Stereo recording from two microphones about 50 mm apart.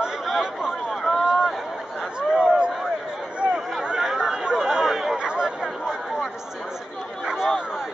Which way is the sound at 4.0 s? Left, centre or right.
Centre.